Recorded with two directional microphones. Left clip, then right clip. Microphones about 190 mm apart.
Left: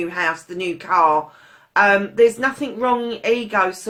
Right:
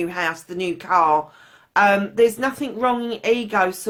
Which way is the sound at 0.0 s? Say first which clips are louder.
Left 2 dB; 45° right (ahead or behind).